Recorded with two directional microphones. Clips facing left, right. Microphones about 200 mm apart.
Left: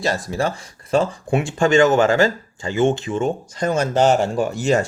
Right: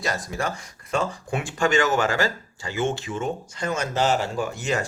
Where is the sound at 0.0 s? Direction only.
30° left (ahead or behind).